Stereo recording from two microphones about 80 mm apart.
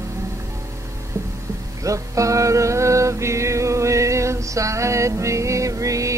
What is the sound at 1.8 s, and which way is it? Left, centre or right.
Music, right.